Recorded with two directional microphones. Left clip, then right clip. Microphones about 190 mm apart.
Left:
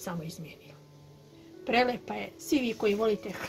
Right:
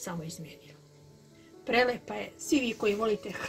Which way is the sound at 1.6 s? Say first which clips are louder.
Even; 5° right (ahead or behind).